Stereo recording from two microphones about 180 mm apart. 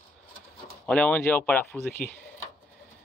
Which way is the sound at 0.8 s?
5° left (ahead or behind).